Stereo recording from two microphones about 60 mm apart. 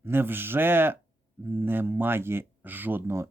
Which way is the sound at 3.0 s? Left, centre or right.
Right.